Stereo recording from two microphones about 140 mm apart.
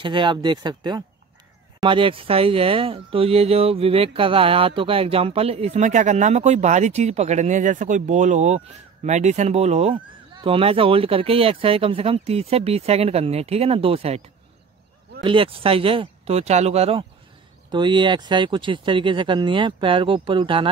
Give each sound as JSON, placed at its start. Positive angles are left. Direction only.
{"t": 0.0, "sound": "speech", "side_deg": -35}
{"t": 15.2, "sound": "speech", "side_deg": -40}
{"t": 17.6, "sound": "speech", "side_deg": -35}